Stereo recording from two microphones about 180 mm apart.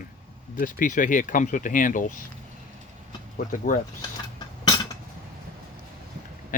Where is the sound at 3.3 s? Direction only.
50° left (ahead or behind).